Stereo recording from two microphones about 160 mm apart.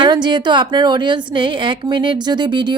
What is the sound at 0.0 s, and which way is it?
A woman's voice, 30° right (ahead or behind).